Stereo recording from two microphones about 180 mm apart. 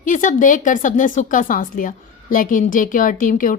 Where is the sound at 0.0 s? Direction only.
45° left (ahead or behind).